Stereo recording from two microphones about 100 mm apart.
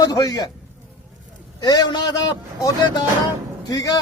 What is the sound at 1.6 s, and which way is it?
Speech, 40° left (ahead or behind).